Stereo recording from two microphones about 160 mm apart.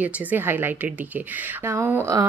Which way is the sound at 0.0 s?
10° right (ahead or behind).